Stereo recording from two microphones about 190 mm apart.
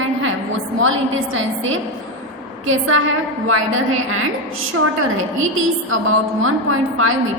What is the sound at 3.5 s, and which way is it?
Speech, 90° right.